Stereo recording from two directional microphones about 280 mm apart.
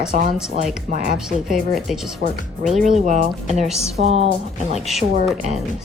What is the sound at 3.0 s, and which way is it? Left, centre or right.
Speech, right.